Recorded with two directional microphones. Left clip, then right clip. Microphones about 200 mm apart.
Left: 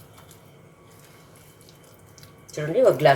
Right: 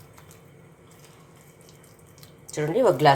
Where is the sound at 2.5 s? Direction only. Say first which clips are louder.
Left 2 dB; 25° right (ahead or behind).